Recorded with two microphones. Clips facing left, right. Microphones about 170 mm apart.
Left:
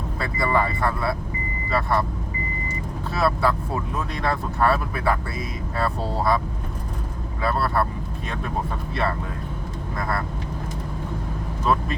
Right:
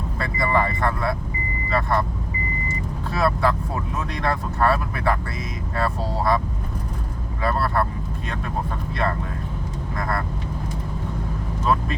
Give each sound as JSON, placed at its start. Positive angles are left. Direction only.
{"t": 0.3, "sound": "speech", "side_deg": -20}
{"t": 0.8, "sound": "speech", "side_deg": 5}
{"t": 3.2, "sound": "vehicle", "side_deg": 5}
{"t": 3.9, "sound": "speech", "side_deg": 0}
{"t": 7.4, "sound": "speech", "side_deg": 5}
{"t": 10.0, "sound": "speech", "side_deg": 5}